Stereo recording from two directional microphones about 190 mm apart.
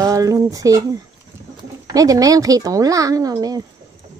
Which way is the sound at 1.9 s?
20° right (ahead or behind).